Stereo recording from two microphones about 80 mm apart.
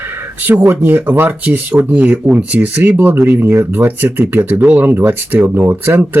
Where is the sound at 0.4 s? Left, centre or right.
Right.